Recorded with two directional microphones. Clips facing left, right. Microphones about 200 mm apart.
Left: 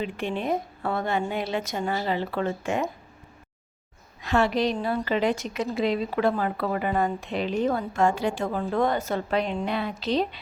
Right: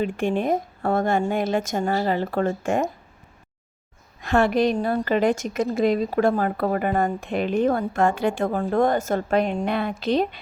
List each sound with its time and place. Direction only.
0.0 s a woman's voice: 45° right (ahead or behind)
4.2 s a woman's voice: 50° right (ahead or behind)